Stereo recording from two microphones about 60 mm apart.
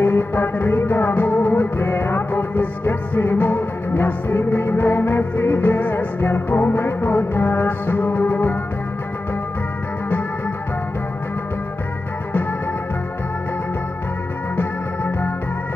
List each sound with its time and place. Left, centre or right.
0.0 s music: left
14.6 s music: left